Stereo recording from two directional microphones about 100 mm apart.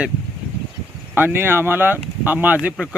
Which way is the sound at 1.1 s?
20° right (ahead or behind).